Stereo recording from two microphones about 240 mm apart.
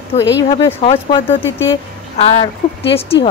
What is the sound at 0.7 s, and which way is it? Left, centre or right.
Speech, left.